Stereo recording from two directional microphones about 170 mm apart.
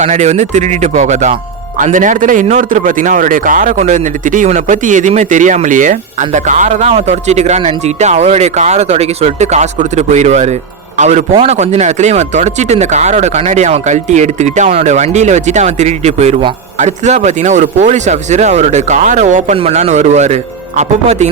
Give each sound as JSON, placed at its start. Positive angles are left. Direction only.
{"t": 0.0, "sound": "speech", "side_deg": -45}